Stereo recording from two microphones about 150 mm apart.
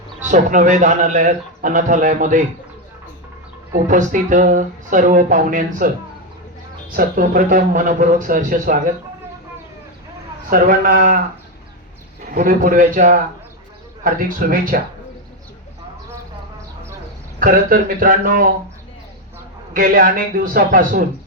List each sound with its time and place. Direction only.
0.3 s speech: 55° right (ahead or behind)
3.7 s speech: 55° right (ahead or behind)
6.9 s a man's voice: 70° right (ahead or behind)
10.5 s a man's voice: 70° right (ahead or behind)
12.3 s a man's voice: 65° right (ahead or behind)
17.4 s a man's voice: 70° right (ahead or behind)
19.7 s a man's voice: 70° right (ahead or behind)